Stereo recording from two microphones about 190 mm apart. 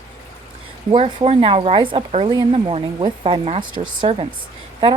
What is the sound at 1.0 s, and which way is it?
Speech, 30° right (ahead or behind).